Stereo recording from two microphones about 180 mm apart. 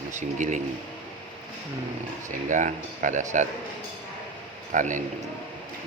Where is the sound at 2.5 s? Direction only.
45° right (ahead or behind).